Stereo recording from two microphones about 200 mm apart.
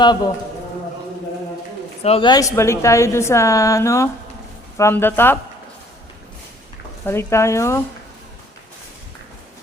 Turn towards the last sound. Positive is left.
turn(degrees=15)  # may be behind; listen again after turning